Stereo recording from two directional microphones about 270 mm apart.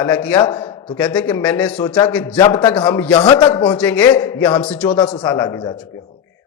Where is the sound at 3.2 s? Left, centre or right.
Centre.